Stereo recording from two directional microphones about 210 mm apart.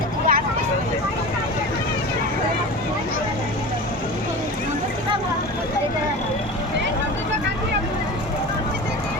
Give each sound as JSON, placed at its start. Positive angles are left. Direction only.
{"t": 0.3, "sound": "vehicle", "side_deg": -45}